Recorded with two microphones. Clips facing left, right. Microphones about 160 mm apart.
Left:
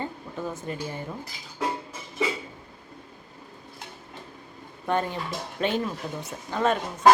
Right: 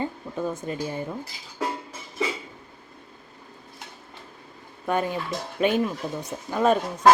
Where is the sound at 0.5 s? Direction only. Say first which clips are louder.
Right 3 dB; 20° right (ahead or behind).